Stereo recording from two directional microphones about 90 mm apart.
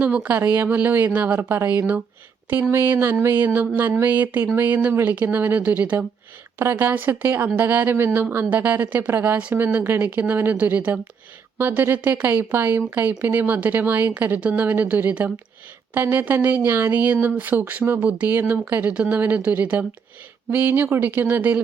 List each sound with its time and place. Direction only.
0.0 s speech: 15° right (ahead or behind)
6.6 s speech: 25° right (ahead or behind)